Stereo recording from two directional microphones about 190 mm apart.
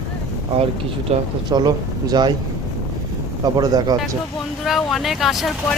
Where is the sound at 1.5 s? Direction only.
20° right (ahead or behind).